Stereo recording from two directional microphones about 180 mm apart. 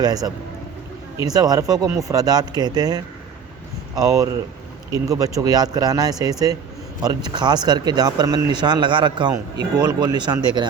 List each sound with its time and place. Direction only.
0.0 s speech: 20° right (ahead or behind)